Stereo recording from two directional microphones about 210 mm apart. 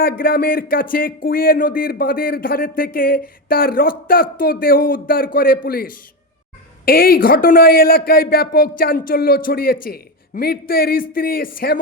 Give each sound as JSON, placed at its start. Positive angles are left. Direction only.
{"t": 0.0, "sound": "speech", "side_deg": 45}